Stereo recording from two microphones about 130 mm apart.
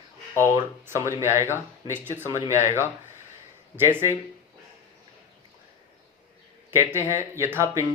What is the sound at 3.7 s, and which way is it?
Speech, 15° right (ahead or behind).